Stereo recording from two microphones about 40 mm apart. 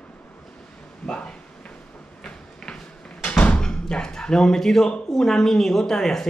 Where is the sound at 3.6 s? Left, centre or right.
Centre.